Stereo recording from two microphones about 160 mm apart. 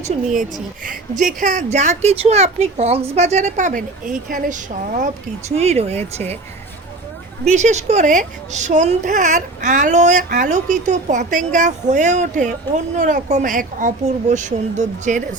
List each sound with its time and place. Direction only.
0.9 s speech: 55° right (ahead or behind)
7.4 s speech: 45° right (ahead or behind)